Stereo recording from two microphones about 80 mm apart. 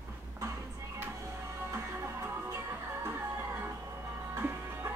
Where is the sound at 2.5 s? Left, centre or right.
Right.